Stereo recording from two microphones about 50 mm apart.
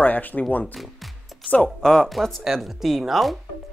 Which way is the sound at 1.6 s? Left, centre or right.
Centre.